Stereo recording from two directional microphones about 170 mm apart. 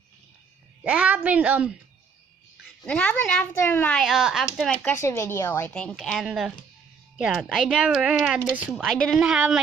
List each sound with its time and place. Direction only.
0.8 s a woman's voice: 10° right (ahead or behind)
2.9 s a child's voice: 5° left (ahead or behind)
4.0 s speech: centre (ahead or behind)
4.6 s a child's voice: 15° left (ahead or behind)
5.7 s speech: 5° left (ahead or behind)